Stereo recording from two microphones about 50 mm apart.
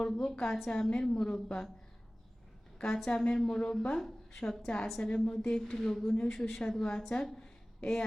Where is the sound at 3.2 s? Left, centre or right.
Centre.